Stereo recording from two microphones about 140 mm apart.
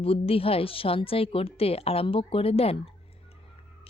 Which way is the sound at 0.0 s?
45° left (ahead or behind).